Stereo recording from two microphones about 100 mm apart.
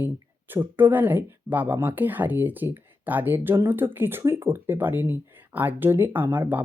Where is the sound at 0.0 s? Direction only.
20° right (ahead or behind).